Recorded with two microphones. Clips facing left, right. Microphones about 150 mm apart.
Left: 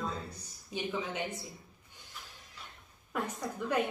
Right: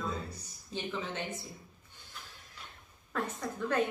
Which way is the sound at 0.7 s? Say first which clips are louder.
Left 1 dB; 10° left (ahead or behind).